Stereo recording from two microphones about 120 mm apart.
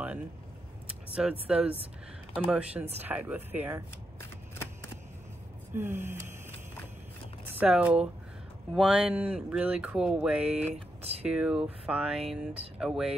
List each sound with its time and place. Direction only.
1.1 s speech: 10° right (ahead or behind)
5.8 s a sound: 20° right (ahead or behind)
7.5 s speech: 10° right (ahead or behind)